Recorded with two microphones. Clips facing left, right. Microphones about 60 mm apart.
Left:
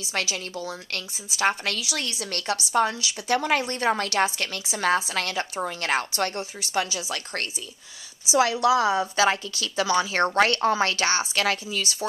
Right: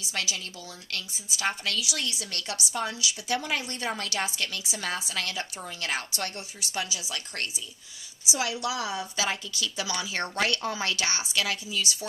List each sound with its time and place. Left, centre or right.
0.1 s a woman's voice: left